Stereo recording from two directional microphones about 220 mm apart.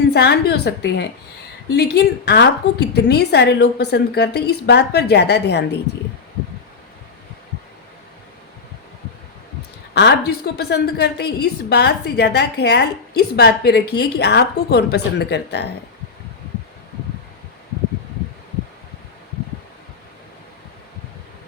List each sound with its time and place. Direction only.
0.1 s a woman's voice: 50° left (ahead or behind)
9.9 s a woman's voice: 50° left (ahead or behind)